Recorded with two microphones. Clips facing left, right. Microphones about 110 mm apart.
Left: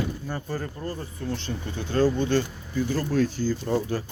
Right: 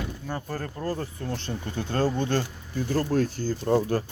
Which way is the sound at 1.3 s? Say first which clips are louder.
Even; 45° right (ahead or behind).